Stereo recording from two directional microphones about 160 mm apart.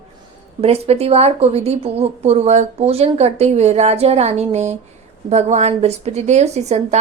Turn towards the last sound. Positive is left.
turn(degrees=-45)  # may be behind; listen again after turning